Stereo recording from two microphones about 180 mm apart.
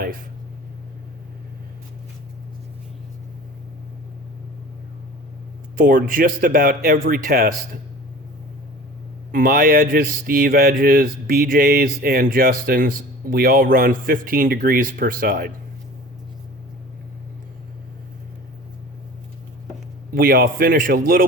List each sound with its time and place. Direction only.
5.7 s speech: 50° right (ahead or behind)
9.3 s speech: 55° right (ahead or behind)
20.1 s speech: 55° right (ahead or behind)